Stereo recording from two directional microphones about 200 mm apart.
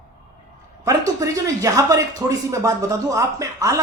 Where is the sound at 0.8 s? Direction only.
15° right (ahead or behind).